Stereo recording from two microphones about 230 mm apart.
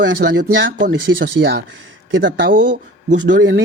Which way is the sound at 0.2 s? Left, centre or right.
Right.